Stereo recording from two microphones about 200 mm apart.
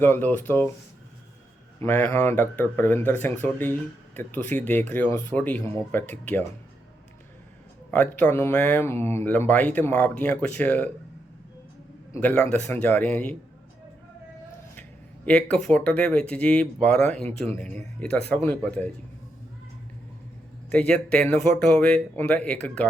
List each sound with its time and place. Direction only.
0.0 s speech: 10° left (ahead or behind)
1.8 s speech: 10° left (ahead or behind)
7.9 s speech: 5° left (ahead or behind)
12.1 s speech: 5° left (ahead or behind)
15.3 s speech: 5° left (ahead or behind)
20.7 s speech: 5° left (ahead or behind)